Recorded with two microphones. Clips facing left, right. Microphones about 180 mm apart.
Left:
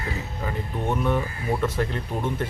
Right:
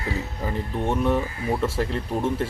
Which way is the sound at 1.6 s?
30° right (ahead or behind).